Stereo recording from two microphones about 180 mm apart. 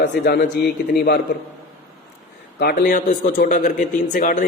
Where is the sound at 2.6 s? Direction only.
55° left (ahead or behind).